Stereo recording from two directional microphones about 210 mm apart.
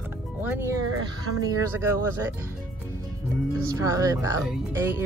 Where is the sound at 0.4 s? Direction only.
10° right (ahead or behind).